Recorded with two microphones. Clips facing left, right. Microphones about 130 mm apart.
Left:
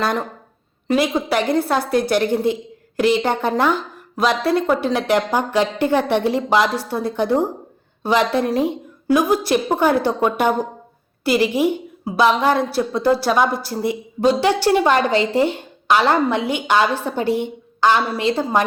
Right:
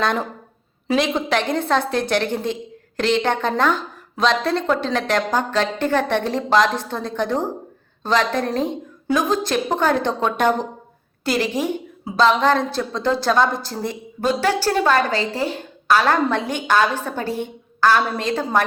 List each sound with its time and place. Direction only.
0.0 s a woman's voice: centre (ahead or behind)